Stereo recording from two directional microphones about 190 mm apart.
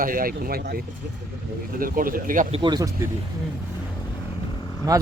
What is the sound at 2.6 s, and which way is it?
Speech, 20° right (ahead or behind).